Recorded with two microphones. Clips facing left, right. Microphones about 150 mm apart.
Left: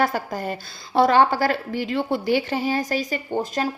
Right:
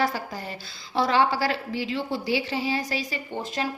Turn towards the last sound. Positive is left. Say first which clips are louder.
# left 5 dB
turn(degrees=40)  # may be behind; listen again after turning